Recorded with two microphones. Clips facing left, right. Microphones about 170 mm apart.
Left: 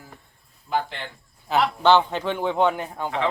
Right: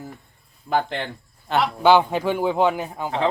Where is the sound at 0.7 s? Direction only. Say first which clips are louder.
Right 4 dB; 55° right (ahead or behind).